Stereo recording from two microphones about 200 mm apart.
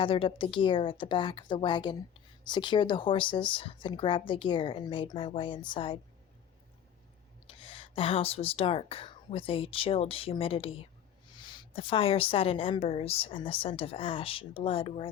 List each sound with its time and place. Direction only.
0.0 s a woman's voice: 25° left (ahead or behind)
7.4 s a woman's voice: 25° left (ahead or behind)